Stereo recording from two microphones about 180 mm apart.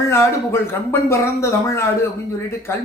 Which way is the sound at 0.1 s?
15° left (ahead or behind).